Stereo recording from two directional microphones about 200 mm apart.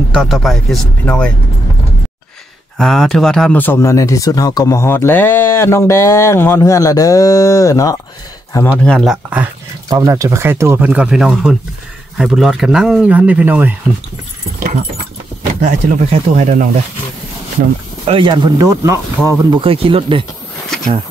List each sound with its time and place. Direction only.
0.1 s speech: centre (ahead or behind)
2.8 s speech: centre (ahead or behind)
9.8 s speech: 20° right (ahead or behind)
15.6 s speech: 40° right (ahead or behind)
18.0 s speech: 25° right (ahead or behind)
19.6 s speech: 25° right (ahead or behind)